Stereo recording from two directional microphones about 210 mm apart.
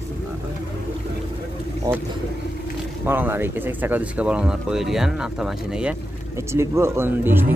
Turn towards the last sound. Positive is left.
turn(degrees=-10)  # may be behind; listen again after turning